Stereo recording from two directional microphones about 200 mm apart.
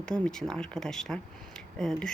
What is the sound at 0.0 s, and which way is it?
Speech, 5° left (ahead or behind).